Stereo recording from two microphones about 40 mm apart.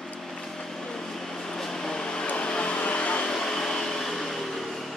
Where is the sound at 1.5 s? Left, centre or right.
Centre.